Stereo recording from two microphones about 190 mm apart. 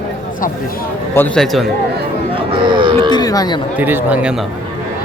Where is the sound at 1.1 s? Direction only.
5° left (ahead or behind).